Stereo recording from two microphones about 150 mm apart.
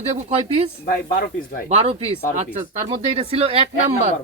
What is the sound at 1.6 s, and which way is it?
Speech, 50° right (ahead or behind).